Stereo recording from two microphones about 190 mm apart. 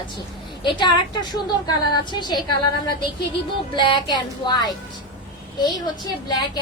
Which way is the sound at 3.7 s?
25° left (ahead or behind).